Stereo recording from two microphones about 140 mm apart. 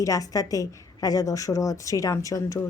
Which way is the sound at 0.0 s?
25° left (ahead or behind).